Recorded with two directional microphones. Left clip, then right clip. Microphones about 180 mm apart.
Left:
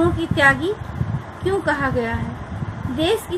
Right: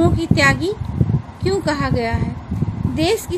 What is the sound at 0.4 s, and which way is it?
A woman's voice, 45° right (ahead or behind).